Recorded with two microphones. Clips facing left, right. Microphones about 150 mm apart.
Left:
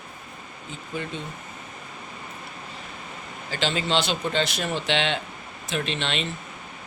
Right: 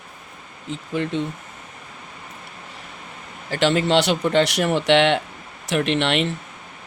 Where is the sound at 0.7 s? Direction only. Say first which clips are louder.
Right 8 dB; 85° right.